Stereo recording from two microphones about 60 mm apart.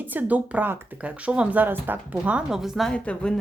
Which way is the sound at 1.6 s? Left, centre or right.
Right.